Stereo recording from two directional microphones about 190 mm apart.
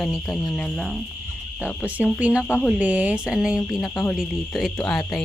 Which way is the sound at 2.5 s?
10° left (ahead or behind).